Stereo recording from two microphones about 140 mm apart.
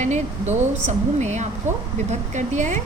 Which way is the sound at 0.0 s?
55° right (ahead or behind).